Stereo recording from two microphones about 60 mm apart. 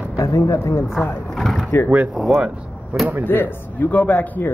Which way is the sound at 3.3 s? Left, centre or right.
Left.